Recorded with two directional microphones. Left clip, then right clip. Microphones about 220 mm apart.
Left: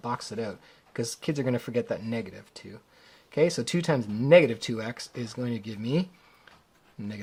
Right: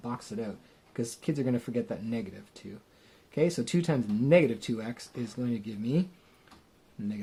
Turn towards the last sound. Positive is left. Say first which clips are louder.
# right 1 dB
turn(degrees=25)  # may be behind; listen again after turning